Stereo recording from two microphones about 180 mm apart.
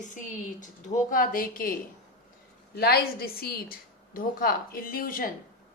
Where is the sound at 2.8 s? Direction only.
60° left (ahead or behind).